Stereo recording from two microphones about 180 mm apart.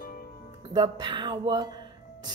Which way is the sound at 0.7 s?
25° right (ahead or behind).